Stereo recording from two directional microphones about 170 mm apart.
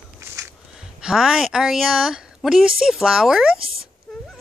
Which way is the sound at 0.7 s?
5° right (ahead or behind).